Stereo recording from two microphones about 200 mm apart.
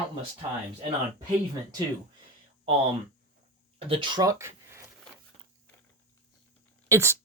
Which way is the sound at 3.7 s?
25° right (ahead or behind).